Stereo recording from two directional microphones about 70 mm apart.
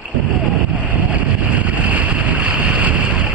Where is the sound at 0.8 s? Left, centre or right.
Centre.